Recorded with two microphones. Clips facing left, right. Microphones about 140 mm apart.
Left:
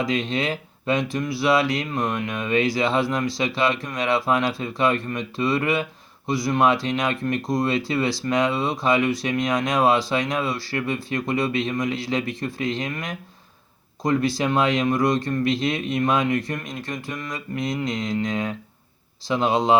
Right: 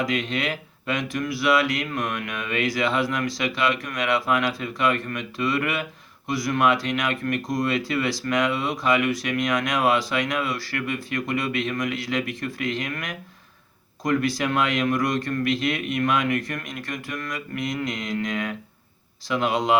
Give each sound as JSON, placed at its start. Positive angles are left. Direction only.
{"t": 0.0, "sound": "speech", "side_deg": 30}